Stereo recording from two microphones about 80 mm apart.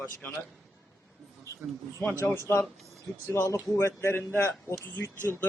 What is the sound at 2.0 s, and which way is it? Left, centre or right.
Speech, centre.